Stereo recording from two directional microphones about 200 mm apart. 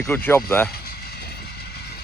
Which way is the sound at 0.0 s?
10° left (ahead or behind).